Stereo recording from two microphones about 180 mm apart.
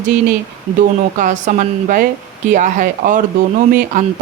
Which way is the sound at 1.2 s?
45° right (ahead or behind).